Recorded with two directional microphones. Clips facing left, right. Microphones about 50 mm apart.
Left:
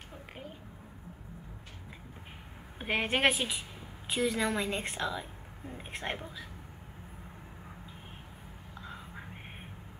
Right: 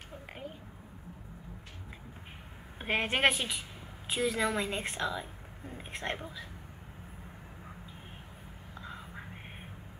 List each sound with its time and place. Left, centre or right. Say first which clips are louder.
2.8 s a woman's voice: even; centre
8.8 s whispering: right 1 dB; centre